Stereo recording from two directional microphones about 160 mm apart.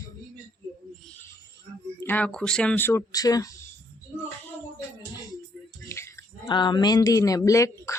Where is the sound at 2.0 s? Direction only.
10° left (ahead or behind).